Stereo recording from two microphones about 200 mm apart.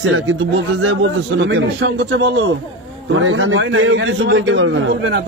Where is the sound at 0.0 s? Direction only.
75° right (ahead or behind).